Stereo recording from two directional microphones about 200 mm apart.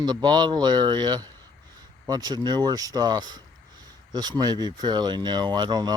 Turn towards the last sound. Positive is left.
turn(degrees=-20)  # may be behind; listen again after turning